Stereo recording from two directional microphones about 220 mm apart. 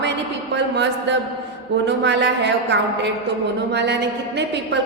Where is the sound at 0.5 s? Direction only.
55° right (ahead or behind).